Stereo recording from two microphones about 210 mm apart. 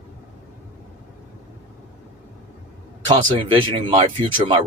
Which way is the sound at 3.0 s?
25° right (ahead or behind).